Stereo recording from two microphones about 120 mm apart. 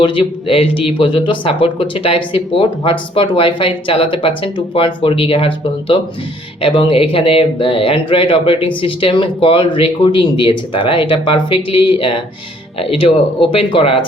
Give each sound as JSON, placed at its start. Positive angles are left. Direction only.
{"t": 0.0, "sound": "speech", "side_deg": 45}